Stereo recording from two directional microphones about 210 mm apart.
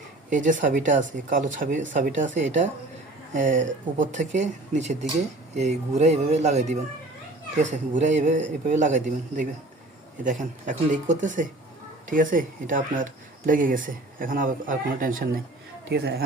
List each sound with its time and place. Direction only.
0.3 s speech: 40° right (ahead or behind)